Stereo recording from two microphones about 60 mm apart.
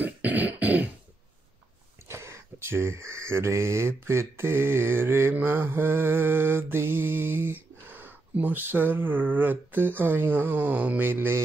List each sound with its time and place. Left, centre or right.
0.0 s throat clearing: right
2.0 s speech: right
5.3 s mantra: right
11.1 s mantra: right